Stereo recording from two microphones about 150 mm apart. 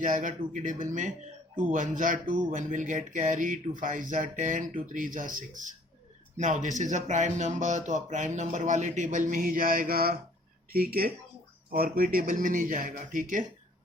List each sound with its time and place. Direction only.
0.0 s speech: 60° right (ahead or behind)